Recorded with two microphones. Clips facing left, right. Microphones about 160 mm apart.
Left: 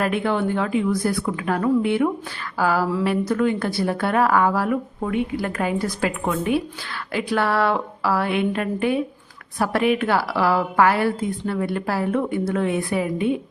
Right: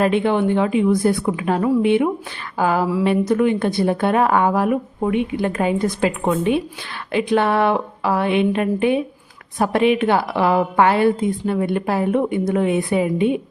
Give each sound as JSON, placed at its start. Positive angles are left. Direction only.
{"t": 0.0, "sound": "a woman's voice", "side_deg": -25}